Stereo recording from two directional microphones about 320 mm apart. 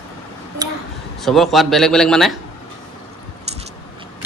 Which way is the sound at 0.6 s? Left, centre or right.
Centre.